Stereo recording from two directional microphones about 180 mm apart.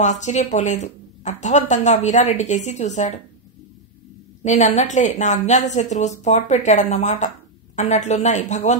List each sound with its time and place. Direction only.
0.0 s speech: 40° left (ahead or behind)
4.4 s speech: 40° left (ahead or behind)